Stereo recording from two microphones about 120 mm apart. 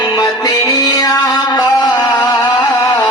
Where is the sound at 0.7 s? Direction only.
35° left (ahead or behind).